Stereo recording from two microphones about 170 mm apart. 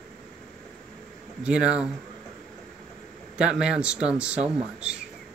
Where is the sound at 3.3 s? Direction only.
5° right (ahead or behind).